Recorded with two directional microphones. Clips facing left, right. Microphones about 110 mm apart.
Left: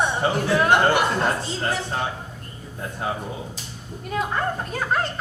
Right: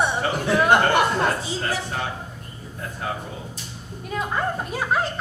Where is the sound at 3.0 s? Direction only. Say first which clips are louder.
Left 2 dB; 20° left (ahead or behind).